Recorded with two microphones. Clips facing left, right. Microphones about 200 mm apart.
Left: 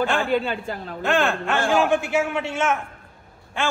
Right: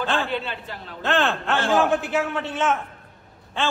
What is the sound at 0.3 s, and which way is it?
Speech, 50° left (ahead or behind).